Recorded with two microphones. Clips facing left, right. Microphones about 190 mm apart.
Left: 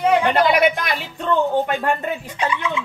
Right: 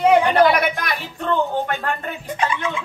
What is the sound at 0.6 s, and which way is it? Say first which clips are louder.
Music: left 5 dB; 20° left (ahead or behind).